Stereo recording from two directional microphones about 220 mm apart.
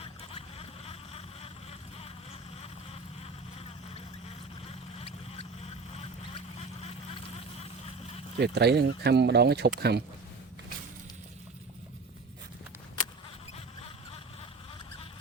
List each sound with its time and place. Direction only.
0.0 s a sound: 25° left (ahead or behind)
5.6 s duck: 30° left (ahead or behind)
8.4 s speech: 50° right (ahead or behind)